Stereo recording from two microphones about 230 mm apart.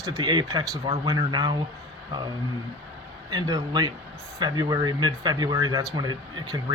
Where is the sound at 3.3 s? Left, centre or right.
Centre.